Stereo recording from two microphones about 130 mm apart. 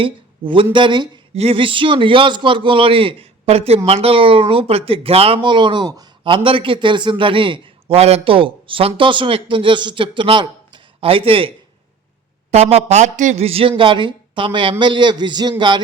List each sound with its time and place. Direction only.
0.0 s speech: 45° right (ahead or behind)